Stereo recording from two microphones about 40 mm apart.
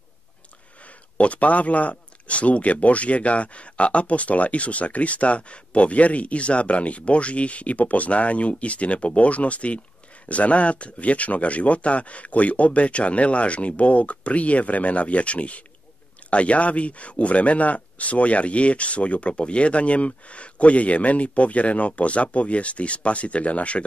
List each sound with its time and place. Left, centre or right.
1.1 s speech: left